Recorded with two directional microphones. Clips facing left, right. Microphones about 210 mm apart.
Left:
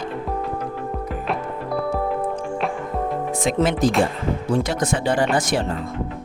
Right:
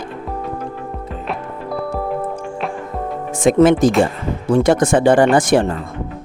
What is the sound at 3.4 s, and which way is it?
Speech, 50° right (ahead or behind).